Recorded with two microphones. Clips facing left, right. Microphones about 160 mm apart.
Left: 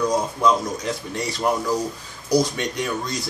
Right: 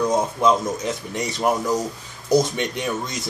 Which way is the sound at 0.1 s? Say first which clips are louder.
Right 1 dB; 25° right (ahead or behind).